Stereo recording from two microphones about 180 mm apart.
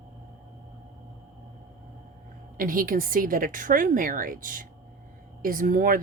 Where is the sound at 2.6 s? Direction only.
50° right (ahead or behind).